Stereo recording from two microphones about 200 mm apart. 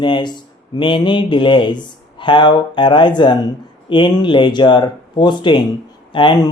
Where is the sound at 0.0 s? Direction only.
25° left (ahead or behind).